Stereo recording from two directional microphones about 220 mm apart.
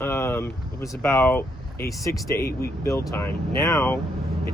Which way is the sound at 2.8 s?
15° left (ahead or behind).